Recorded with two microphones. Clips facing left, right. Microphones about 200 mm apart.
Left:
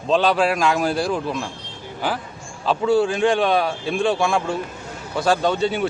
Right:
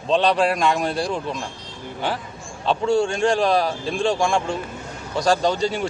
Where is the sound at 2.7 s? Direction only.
5° left (ahead or behind).